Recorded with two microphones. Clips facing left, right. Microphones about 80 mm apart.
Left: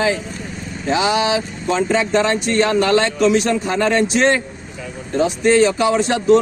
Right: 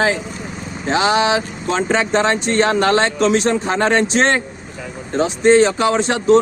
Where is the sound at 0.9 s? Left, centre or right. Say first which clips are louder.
Right 2 dB; right.